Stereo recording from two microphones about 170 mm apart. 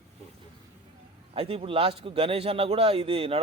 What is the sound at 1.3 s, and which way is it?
A man's voice, 35° right (ahead or behind).